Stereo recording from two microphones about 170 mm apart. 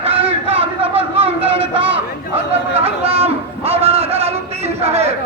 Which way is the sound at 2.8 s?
35° right (ahead or behind).